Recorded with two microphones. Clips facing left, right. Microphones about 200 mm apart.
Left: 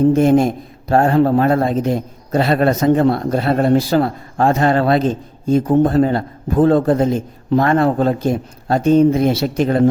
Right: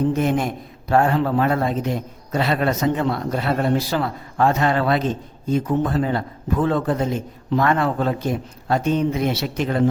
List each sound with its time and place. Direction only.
0.2 s a man's voice: 30° left (ahead or behind)
3.8 s a man's voice: 50° left (ahead or behind)